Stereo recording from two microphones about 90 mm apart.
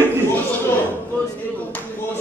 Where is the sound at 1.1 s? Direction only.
20° left (ahead or behind).